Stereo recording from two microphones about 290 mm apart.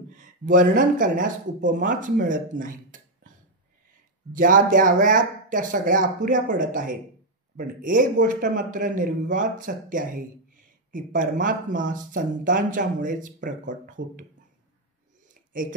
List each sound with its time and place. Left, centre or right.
0.1 s speech: right
4.3 s speech: right